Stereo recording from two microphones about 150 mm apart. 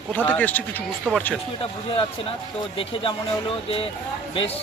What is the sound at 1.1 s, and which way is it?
Speech, 5° right (ahead or behind).